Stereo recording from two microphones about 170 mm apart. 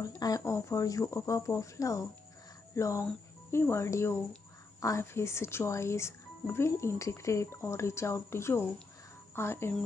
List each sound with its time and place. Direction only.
0.2 s speech: 20° left (ahead or behind)